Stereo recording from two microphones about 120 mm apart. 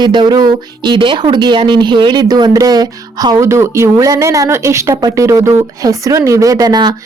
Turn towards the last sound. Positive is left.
turn(degrees=-35)  # may be behind; listen again after turning